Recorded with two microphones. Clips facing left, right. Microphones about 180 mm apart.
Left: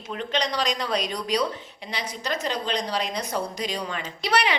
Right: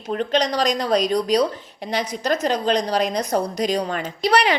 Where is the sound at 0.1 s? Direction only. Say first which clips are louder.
Right 7 dB; 40° right (ahead or behind).